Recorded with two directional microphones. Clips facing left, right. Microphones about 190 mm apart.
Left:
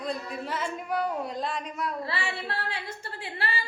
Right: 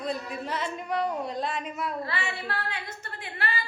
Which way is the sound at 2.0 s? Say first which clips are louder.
Even; 30° left (ahead or behind).